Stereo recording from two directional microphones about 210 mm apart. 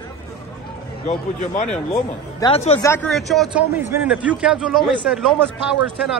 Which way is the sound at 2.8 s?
5° left (ahead or behind).